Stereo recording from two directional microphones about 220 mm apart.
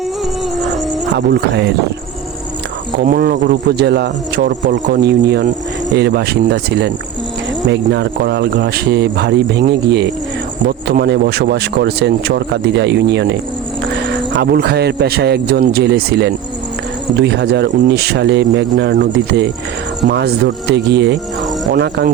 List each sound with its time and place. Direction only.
3.0 s a man's voice: 45° right (ahead or behind)